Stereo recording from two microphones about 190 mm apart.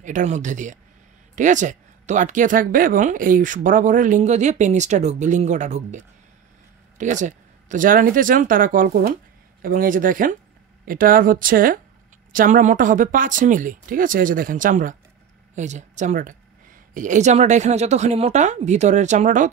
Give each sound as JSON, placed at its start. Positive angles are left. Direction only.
{"t": 0.0, "sound": "speech", "side_deg": -40}